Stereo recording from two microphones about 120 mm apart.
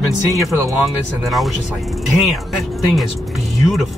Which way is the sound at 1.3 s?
Centre (ahead or behind).